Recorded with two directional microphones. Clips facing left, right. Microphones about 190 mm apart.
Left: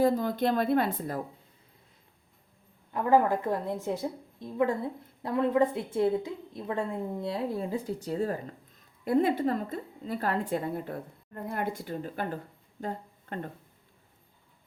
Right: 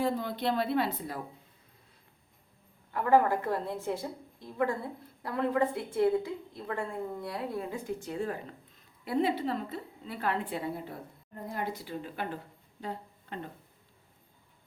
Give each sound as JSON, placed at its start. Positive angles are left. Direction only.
{"t": 0.0, "sound": "a woman's voice", "side_deg": 45}
{"t": 2.9, "sound": "a woman's voice", "side_deg": 20}
{"t": 12.8, "sound": "a sound", "side_deg": 50}